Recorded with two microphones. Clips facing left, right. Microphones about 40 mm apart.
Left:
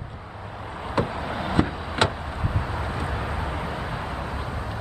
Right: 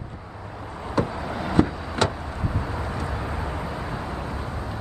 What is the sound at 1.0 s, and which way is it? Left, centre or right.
Vehicle, left.